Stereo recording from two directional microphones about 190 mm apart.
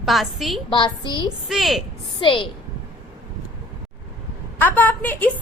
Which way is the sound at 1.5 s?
Centre (ahead or behind).